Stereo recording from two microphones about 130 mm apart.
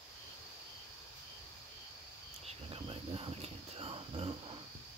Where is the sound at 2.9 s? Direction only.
45° right (ahead or behind).